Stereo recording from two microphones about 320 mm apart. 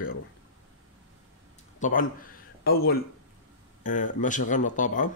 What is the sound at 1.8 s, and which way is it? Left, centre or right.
Speech, left.